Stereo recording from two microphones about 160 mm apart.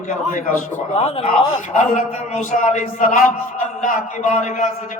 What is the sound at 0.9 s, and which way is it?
A man's voice, 40° left (ahead or behind).